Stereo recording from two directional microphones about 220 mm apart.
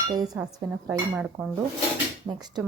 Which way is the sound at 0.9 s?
5° right (ahead or behind).